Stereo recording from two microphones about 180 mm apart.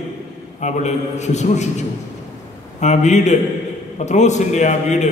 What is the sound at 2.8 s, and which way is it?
A man's voice, 40° left (ahead or behind).